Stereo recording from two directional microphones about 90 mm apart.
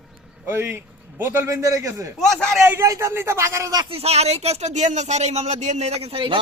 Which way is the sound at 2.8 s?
35° right (ahead or behind).